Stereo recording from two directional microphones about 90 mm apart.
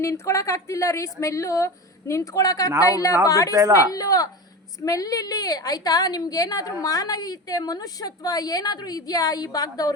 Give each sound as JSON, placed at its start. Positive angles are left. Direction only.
{"t": 0.0, "sound": "a woman's voice", "side_deg": 35}